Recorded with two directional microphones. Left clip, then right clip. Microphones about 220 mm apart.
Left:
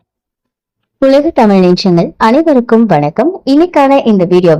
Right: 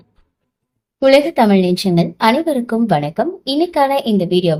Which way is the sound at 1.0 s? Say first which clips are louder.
Left 4 dB; 30° left (ahead or behind).